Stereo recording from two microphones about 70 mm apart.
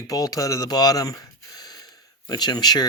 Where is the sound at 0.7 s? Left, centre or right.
Left.